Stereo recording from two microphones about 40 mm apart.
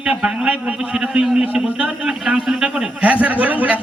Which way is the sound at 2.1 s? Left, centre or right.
Centre.